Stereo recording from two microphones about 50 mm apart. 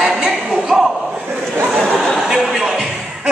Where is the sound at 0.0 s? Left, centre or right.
Centre.